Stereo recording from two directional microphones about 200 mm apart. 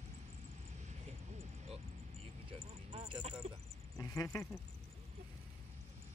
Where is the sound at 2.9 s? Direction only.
30° right (ahead or behind).